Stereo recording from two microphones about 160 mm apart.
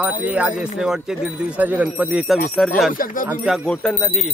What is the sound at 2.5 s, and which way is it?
Jingle bell, centre (ahead or behind).